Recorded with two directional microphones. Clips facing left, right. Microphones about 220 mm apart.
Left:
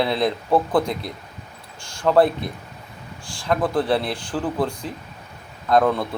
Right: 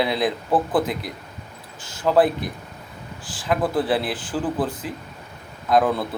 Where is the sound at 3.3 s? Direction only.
5° right (ahead or behind).